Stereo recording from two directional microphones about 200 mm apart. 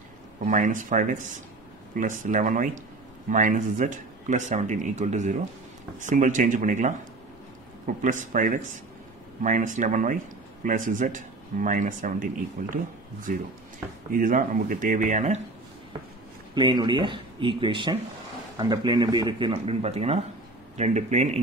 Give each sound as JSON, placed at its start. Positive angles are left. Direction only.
{"t": 0.5, "sound": "speech", "side_deg": -40}
{"t": 14.1, "sound": "speech", "side_deg": -45}
{"t": 16.5, "sound": "speech", "side_deg": -25}